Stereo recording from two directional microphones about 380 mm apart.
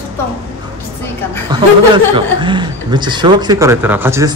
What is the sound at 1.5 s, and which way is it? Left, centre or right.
A man's voice, centre.